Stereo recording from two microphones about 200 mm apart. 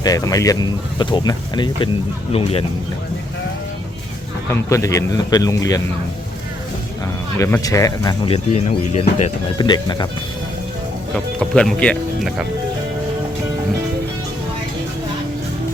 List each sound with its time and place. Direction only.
0.0 s speech: 20° left (ahead or behind)
4.4 s a man's voice: 15° left (ahead or behind)
7.3 s speech: 15° left (ahead or behind); by 9.3 s 35° left (ahead or behind)
9.6 s speech: 20° left (ahead or behind)
11.1 s speech: 5° left (ahead or behind)